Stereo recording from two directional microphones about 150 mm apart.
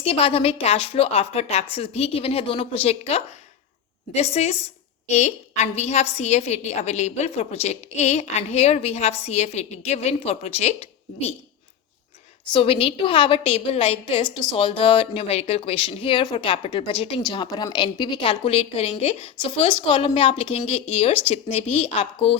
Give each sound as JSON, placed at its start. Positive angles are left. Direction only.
{"t": 0.0, "sound": "a woman's voice", "side_deg": 40}
{"t": 12.5, "sound": "a woman's voice", "side_deg": 35}